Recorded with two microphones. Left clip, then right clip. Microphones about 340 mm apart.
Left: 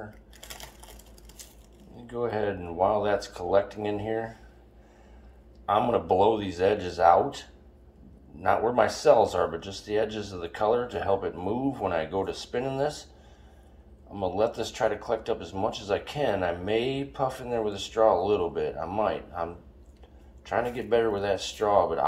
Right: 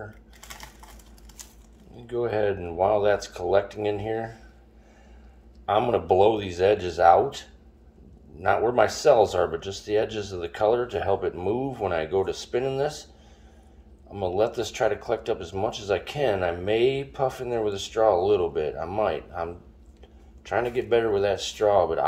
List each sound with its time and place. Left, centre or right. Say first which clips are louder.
2.0 s speech: right 4 dB; right
5.7 s speech: right 2 dB; right
14.1 s speech: right 2 dB; right